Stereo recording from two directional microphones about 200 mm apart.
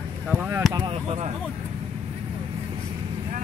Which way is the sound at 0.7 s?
25° right (ahead or behind).